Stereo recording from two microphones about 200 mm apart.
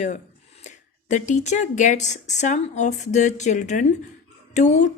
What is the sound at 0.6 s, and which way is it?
Speech, 35° left (ahead or behind).